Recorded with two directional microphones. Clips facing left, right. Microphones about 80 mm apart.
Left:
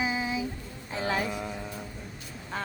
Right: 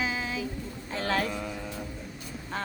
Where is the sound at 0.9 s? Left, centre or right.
Centre.